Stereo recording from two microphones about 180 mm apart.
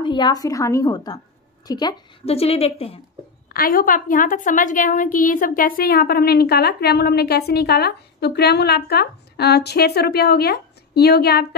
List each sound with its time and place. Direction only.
0.0 s a woman's voice: 25° left (ahead or behind)
2.2 s a woman's voice: 35° left (ahead or behind)
3.5 s a woman's voice: 50° left (ahead or behind)